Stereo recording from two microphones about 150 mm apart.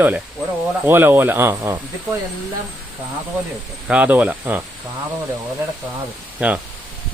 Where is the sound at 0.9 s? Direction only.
15° right (ahead or behind).